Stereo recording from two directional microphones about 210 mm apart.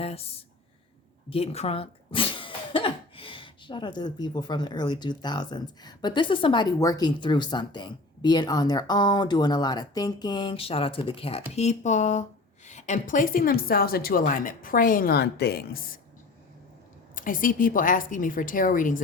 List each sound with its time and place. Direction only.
0.0 s a sound: 30° left (ahead or behind)
1.3 s a woman's voice: 30° left (ahead or behind); by 15.8 s 50° left (ahead or behind)
17.2 s a woman's voice: 40° left (ahead or behind)